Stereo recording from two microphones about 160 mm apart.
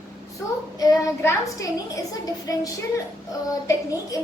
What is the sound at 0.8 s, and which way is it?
A woman's voice, 20° left (ahead or behind).